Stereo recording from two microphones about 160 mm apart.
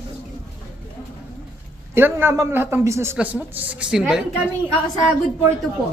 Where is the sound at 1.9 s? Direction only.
15° right (ahead or behind).